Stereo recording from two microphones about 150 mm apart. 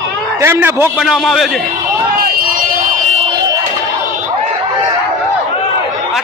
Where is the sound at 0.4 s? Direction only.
15° right (ahead or behind).